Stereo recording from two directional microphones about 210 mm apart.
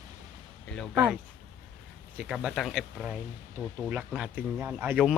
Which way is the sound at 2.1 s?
5° right (ahead or behind).